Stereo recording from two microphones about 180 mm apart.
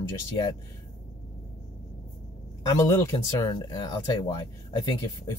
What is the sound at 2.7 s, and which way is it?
Speech, 15° left (ahead or behind).